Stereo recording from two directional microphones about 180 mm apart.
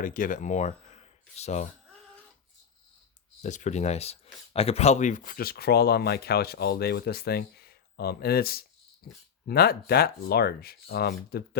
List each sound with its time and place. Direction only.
0.0 s speech: 50° left (ahead or behind)
3.4 s speech: 40° left (ahead or behind); by 11.4 s 60° left (ahead or behind)